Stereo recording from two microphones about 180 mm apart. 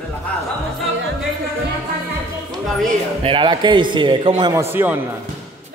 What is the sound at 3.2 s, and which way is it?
A man's voice, 25° right (ahead or behind).